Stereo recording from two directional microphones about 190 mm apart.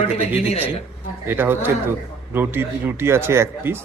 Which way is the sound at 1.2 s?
10° right (ahead or behind).